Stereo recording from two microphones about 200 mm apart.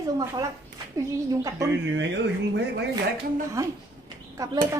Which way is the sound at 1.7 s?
60° right (ahead or behind).